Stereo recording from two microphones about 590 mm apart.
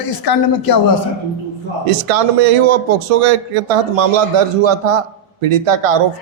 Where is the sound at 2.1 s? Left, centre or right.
Right.